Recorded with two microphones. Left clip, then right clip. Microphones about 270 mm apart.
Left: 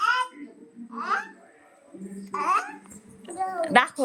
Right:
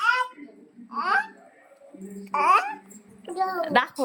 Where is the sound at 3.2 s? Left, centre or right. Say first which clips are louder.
Right 2 dB; centre.